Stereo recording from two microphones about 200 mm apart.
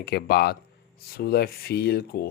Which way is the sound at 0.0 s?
55° left (ahead or behind).